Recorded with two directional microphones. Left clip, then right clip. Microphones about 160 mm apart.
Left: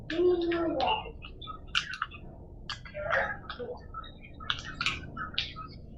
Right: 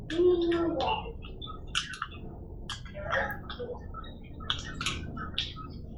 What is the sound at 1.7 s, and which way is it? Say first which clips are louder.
Bird: left 2 dB; 25° left (ahead or behind).